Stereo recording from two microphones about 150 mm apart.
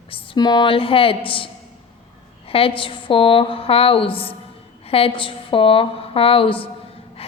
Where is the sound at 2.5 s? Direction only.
40° left (ahead or behind).